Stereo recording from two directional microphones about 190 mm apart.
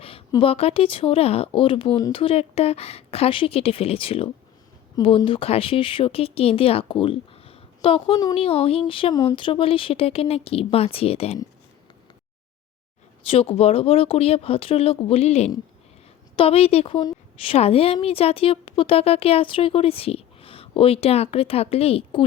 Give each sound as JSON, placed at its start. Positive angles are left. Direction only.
{"t": 0.0, "sound": "a woman's voice", "side_deg": 25}
{"t": 8.1, "sound": "a woman's voice", "side_deg": 20}
{"t": 8.4, "sound": "a woman's voice", "side_deg": 30}
{"t": 13.2, "sound": "a woman's voice", "side_deg": 30}